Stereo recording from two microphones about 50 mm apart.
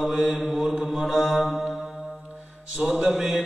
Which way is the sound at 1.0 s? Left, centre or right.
Centre.